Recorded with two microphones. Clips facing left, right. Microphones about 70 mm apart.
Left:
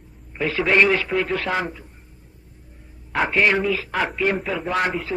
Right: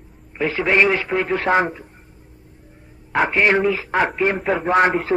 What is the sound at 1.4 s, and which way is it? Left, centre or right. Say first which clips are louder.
Speech: right 6 dB; right.